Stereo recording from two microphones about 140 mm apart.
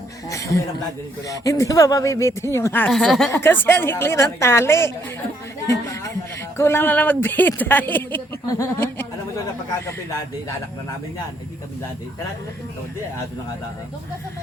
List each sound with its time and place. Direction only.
0.3 s speech: 20° left (ahead or behind)
2.9 s speech: centre (ahead or behind)
3.3 s speech: 15° left (ahead or behind)
6.6 s speech: 15° left (ahead or behind)